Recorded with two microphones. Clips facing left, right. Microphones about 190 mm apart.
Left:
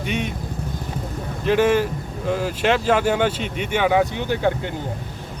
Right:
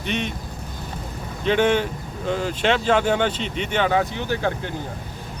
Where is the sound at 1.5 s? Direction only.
5° left (ahead or behind).